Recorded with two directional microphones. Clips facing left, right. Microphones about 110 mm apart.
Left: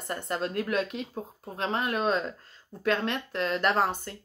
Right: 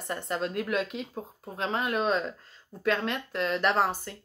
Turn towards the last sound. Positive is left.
turn(degrees=0)  # may be behind; listen again after turning